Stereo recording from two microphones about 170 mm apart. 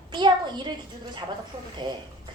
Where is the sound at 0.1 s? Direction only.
25° right (ahead or behind).